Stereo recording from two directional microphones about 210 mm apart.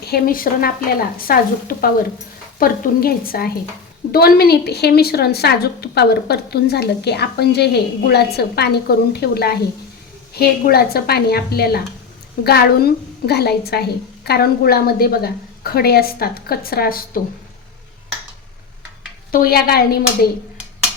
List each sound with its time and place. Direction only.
0.0 s speech: 45° left (ahead or behind)
19.3 s speech: 45° left (ahead or behind)